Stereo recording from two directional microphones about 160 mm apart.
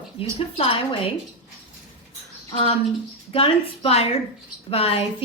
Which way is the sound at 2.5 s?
35° left (ahead or behind).